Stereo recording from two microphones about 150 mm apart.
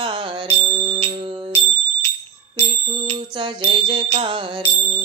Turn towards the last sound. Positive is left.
turn(degrees=-40)  # may be behind; listen again after turning